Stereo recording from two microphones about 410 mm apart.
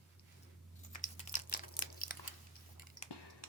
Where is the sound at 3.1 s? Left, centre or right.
Left.